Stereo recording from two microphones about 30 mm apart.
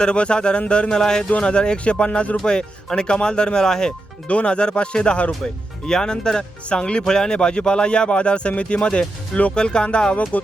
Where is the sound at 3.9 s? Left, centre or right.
Left.